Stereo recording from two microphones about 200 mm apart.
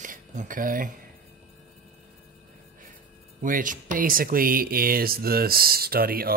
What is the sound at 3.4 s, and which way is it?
Speech, 40° right (ahead or behind).